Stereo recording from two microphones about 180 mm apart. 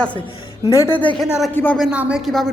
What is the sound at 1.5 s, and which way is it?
Speech, 10° left (ahead or behind).